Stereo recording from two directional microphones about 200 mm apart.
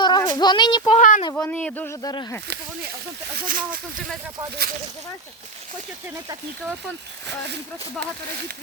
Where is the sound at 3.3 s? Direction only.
45° right (ahead or behind).